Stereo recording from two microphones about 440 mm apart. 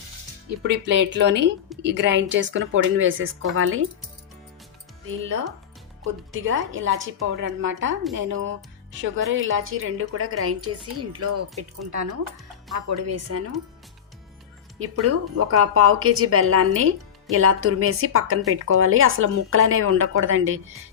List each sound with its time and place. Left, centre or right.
0.9 s a woman's voice: right
5.0 s a woman's voice: right
14.8 s a woman's voice: right